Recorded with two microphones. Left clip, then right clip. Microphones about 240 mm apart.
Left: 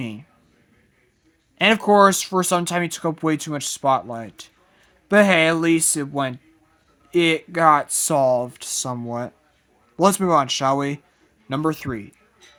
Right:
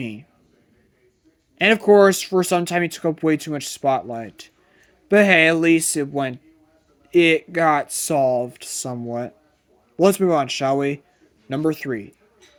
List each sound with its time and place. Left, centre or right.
0.0 s speech: centre
1.5 s speech: centre